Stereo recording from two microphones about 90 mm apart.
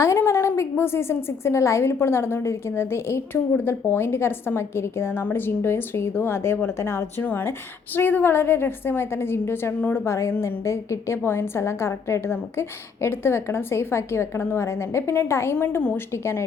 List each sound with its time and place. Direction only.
0.0 s a woman's voice: 30° left (ahead or behind)